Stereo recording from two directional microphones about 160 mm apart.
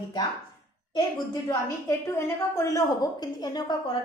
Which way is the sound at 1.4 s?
20° left (ahead or behind).